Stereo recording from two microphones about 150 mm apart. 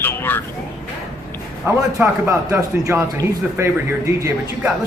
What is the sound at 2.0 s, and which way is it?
A man's voice, 20° right (ahead or behind).